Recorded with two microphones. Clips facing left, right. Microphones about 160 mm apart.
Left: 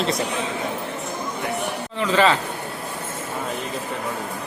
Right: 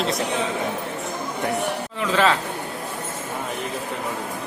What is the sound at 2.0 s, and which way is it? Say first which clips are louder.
Speech: left 2 dB; centre (ahead or behind).